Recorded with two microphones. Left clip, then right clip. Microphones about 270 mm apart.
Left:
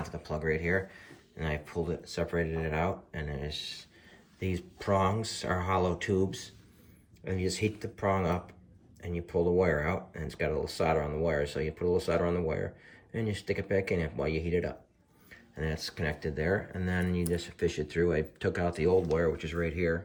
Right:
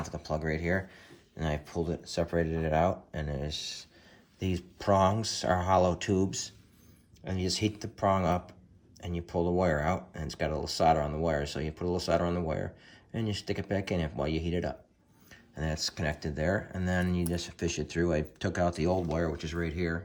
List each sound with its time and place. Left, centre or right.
0.0 s speech: centre
2.3 s speech: right
3.2 s speech: centre
4.9 s speech: centre